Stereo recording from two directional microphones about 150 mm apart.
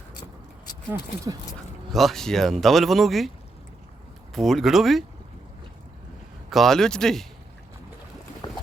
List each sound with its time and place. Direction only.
1.9 s speech: centre (ahead or behind)
4.4 s speech: centre (ahead or behind)
6.5 s speech: centre (ahead or behind)
8.4 s boat: 30° left (ahead or behind)